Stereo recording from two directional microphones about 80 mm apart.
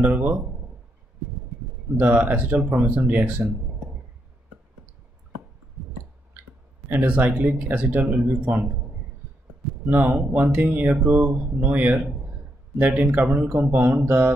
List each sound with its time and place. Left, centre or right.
0.0 s speech: right
2.0 s speech: centre
6.9 s speech: centre
9.8 s speech: right